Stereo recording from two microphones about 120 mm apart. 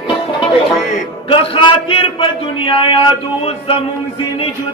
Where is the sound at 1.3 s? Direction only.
45° left (ahead or behind).